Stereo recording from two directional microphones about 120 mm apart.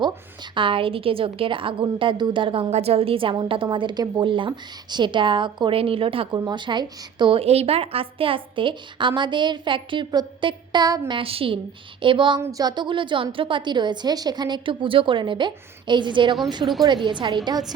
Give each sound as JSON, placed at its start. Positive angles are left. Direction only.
{"t": 0.5, "sound": "a woman's voice", "side_deg": -45}
{"t": 2.6, "sound": "a woman's voice", "side_deg": -60}
{"t": 6.3, "sound": "a woman's voice", "side_deg": -35}
{"t": 11.2, "sound": "a woman's voice", "side_deg": -50}
{"t": 12.4, "sound": "a woman's voice", "side_deg": -30}